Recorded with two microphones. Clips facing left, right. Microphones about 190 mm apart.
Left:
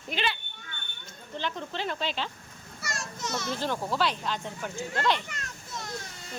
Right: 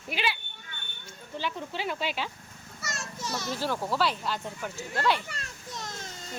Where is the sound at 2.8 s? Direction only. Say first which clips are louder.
Left 1 dB; 20° right (ahead or behind).